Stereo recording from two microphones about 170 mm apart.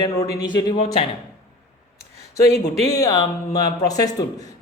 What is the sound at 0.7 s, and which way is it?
Speech, 35° left (ahead or behind).